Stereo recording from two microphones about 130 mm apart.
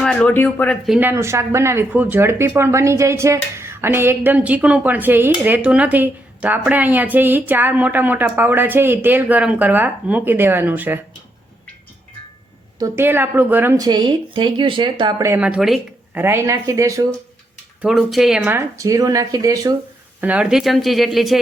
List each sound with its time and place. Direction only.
0.0 s speech: 5° left (ahead or behind)
0.9 s speech: 15° right (ahead or behind)
12.8 s speech: 15° right (ahead or behind)
13.7 s speech: 30° right (ahead or behind)
15.4 s speech: 5° right (ahead or behind)
16.1 s speech: 20° right (ahead or behind)
17.8 s speech: 5° right (ahead or behind)
18.4 s speech: 20° right (ahead or behind)
20.2 s speech: 10° right (ahead or behind)